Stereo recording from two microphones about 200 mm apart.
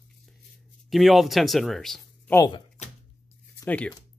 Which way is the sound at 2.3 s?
15° left (ahead or behind).